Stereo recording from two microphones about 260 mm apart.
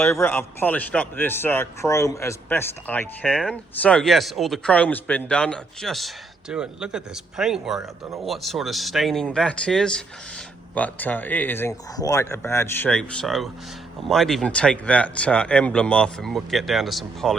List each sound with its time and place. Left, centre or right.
0.0 s a man's voice: centre